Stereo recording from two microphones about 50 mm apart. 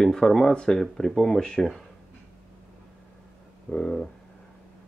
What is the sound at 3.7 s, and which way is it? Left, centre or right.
Speech, centre.